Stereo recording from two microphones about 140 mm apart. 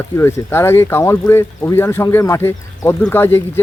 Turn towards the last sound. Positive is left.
turn(degrees=15)  # may be behind; listen again after turning